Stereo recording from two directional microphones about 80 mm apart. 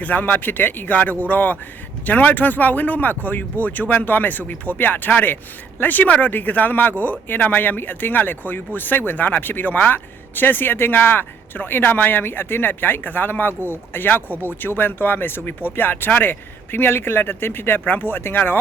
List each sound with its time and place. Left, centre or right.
0.0 s speech: centre